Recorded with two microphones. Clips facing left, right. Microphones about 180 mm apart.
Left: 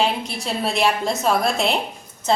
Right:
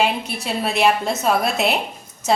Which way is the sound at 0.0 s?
5° right (ahead or behind).